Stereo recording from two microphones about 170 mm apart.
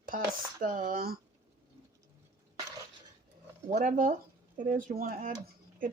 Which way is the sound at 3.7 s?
50° right (ahead or behind).